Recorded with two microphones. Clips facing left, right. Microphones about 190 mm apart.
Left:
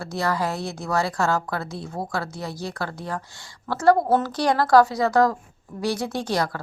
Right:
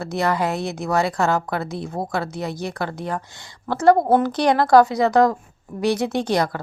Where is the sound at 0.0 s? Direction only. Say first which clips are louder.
Right 3 dB; 20° right (ahead or behind).